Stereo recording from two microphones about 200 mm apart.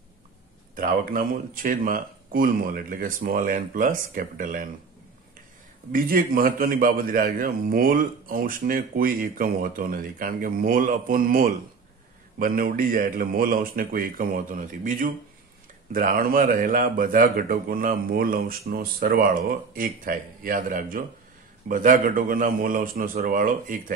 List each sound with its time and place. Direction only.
0.7 s a man's voice: 45° right (ahead or behind)
5.9 s a man's voice: 45° right (ahead or behind)